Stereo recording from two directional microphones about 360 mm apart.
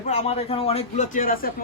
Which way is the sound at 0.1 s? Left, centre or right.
Centre.